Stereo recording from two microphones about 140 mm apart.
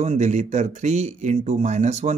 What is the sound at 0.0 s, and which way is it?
Speech, 55° right (ahead or behind).